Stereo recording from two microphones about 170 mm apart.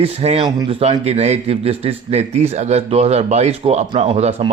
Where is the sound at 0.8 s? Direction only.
40° right (ahead or behind).